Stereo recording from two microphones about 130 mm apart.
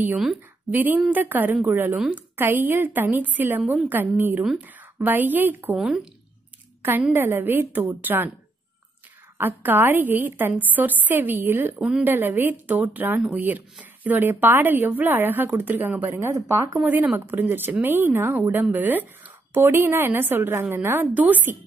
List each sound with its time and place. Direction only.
0.7 s a woman's voice: 15° right (ahead or behind)
6.8 s speech: 15° right (ahead or behind)
9.4 s speech: 15° right (ahead or behind)